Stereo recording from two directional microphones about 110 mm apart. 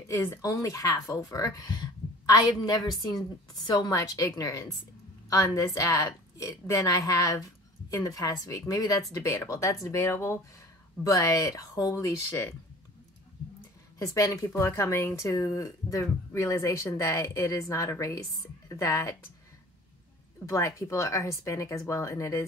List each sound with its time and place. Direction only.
0.1 s a woman's voice: 30° left (ahead or behind)
13.9 s speech: 30° left (ahead or behind)
20.4 s speech: 30° left (ahead or behind)